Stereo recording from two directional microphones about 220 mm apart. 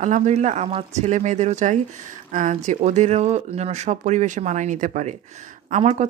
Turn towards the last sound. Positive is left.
turn(degrees=-30)  # may be behind; listen again after turning